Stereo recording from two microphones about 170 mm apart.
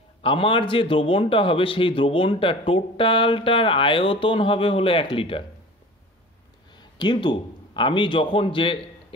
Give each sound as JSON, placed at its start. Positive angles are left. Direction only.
{"t": 0.2, "sound": "a man's voice", "side_deg": 30}
{"t": 6.7, "sound": "a man's voice", "side_deg": 25}